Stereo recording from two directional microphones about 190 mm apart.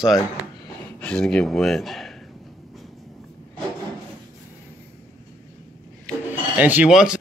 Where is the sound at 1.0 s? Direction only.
5° left (ahead or behind).